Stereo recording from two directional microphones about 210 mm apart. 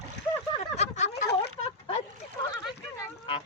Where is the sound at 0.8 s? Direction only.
35° left (ahead or behind).